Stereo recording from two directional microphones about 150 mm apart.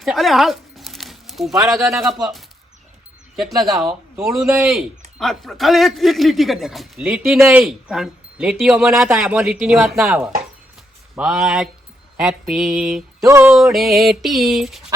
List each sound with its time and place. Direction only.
0.0 s a sound: centre (ahead or behind)
1.7 s speech: centre (ahead or behind)
3.3 s speech: centre (ahead or behind)
11.2 s speech: 5° right (ahead or behind)
13.2 s a sound: 20° right (ahead or behind)
13.5 s speech: centre (ahead or behind)